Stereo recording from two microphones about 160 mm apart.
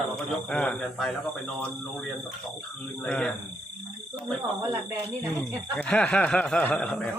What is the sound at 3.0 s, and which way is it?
Speech, 5° left (ahead or behind).